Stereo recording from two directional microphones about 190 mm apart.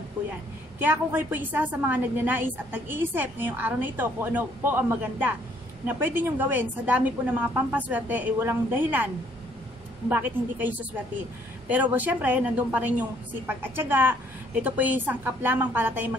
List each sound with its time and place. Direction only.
0.7 s a woman's voice: 10° right (ahead or behind)